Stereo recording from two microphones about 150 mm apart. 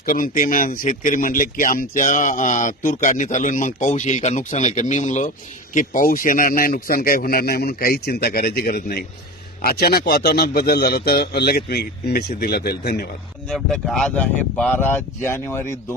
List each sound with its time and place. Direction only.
0.0 s a man's voice: 65° left (ahead or behind); by 13.1 s 90° left
13.5 s speech: 5° left (ahead or behind)